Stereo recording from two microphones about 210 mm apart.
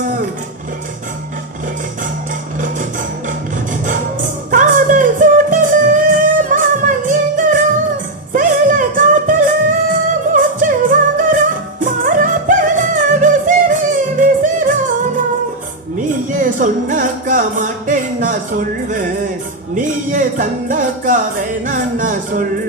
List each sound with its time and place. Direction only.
4.5 s music: 40° right (ahead or behind)